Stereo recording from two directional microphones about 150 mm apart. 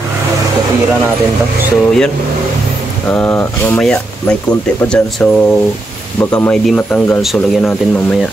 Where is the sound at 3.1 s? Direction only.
10° left (ahead or behind).